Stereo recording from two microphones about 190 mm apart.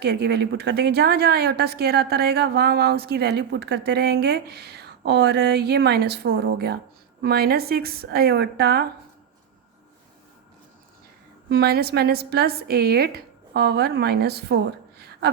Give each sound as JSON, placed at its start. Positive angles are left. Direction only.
{"t": 0.0, "sound": "a woman's voice", "side_deg": -60}
{"t": 11.4, "sound": "a woman's voice", "side_deg": -60}